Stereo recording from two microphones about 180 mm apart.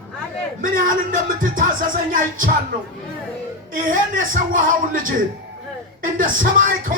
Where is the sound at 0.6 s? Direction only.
50° right (ahead or behind).